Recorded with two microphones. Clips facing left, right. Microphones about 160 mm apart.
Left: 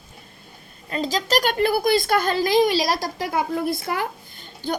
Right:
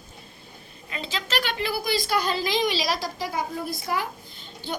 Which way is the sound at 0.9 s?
40° left (ahead or behind).